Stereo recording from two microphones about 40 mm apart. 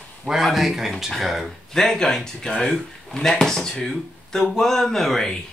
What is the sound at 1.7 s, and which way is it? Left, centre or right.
Speech, centre.